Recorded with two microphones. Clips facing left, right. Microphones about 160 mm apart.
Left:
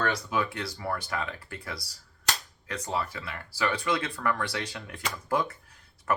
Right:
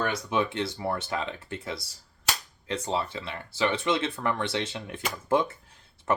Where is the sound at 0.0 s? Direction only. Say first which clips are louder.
Right 1 dB; 20° right (ahead or behind).